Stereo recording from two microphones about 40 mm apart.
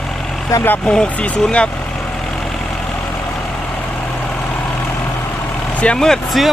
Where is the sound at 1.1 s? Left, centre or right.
Left.